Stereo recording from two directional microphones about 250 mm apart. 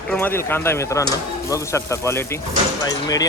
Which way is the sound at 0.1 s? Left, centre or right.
Centre.